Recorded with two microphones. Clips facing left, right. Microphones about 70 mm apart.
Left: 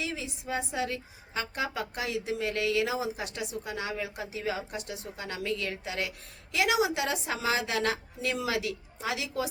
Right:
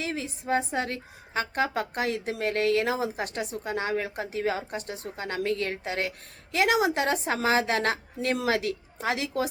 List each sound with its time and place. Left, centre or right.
0.0 s a woman's voice: right